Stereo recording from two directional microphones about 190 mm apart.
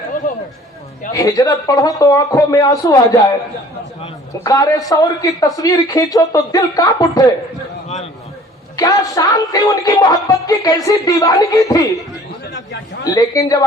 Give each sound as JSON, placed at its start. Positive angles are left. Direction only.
{"t": 1.1, "sound": "speech", "side_deg": 20}
{"t": 4.4, "sound": "speech", "side_deg": 20}
{"t": 8.7, "sound": "a sound", "side_deg": 20}
{"t": 9.1, "sound": "speech", "side_deg": 20}
{"t": 13.1, "sound": "a man's voice", "side_deg": 20}